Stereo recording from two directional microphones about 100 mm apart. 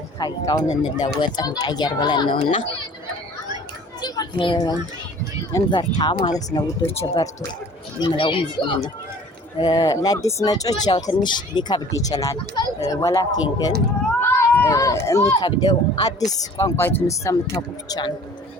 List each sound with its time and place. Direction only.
0.2 s speech: 40° left (ahead or behind)
4.0 s a sound: 40° left (ahead or behind)
4.5 s speech: 45° left (ahead or behind)
6.9 s speech: 90° left
8.0 s speech: 60° left (ahead or behind)
9.6 s speech: 45° left (ahead or behind)
14.2 s a child's voice: 25° left (ahead or behind)
15.4 s speech: 45° left (ahead or behind)
16.7 s speech: 25° left (ahead or behind); by 18.1 s 40° left (ahead or behind)